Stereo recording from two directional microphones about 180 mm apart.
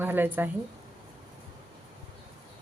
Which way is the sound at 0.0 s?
10° right (ahead or behind).